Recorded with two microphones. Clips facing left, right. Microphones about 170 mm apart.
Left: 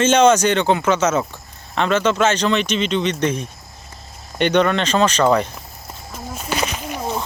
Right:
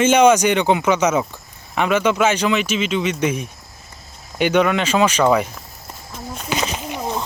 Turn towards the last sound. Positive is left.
turn(degrees=-20)  # may be behind; listen again after turning